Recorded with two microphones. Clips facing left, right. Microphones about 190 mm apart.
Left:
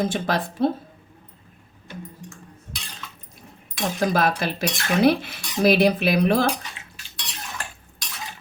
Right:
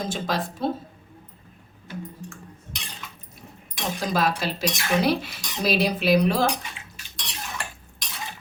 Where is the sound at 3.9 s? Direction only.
55° left (ahead or behind).